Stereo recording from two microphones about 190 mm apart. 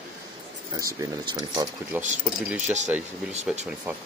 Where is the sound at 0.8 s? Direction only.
15° right (ahead or behind).